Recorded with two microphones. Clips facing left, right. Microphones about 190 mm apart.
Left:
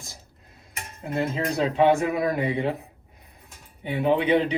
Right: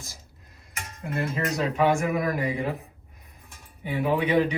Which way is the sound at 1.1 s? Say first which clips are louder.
Left 2 dB; 30° left (ahead or behind).